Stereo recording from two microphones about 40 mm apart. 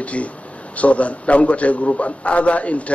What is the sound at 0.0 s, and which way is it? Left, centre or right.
A man's voice, left.